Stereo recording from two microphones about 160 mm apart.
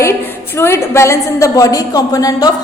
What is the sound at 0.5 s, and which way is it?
A woman's voice, 15° left (ahead or behind).